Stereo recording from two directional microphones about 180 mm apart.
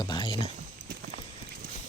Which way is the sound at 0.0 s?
25° left (ahead or behind).